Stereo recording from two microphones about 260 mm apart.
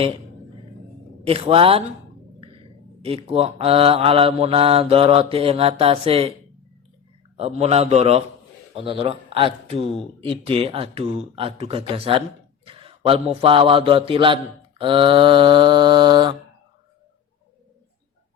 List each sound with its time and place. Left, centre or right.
1.2 s mantra: right
3.0 s mantra: right
7.3 s mantra: right
8.7 s speech: right
10.2 s mantra: right